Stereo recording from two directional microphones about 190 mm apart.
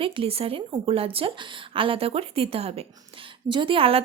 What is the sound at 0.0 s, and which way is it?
Speech, 30° right (ahead or behind).